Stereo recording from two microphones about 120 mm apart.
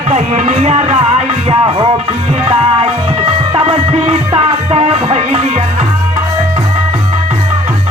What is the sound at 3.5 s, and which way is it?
Music, 55° right (ahead or behind).